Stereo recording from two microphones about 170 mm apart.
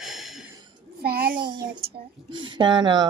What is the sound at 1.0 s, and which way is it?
Speech, 65° right (ahead or behind).